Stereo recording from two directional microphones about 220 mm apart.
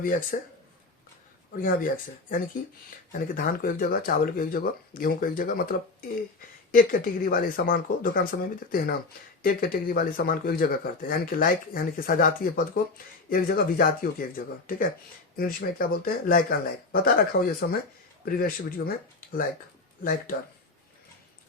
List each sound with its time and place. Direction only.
0.0 s speech: 40° left (ahead or behind)
1.5 s speech: 40° left (ahead or behind)
19.2 s a sound: 40° left (ahead or behind)